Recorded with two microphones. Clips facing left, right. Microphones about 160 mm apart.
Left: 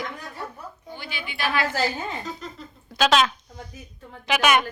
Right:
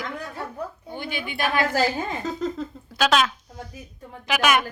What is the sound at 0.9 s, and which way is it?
Speech, 50° right (ahead or behind).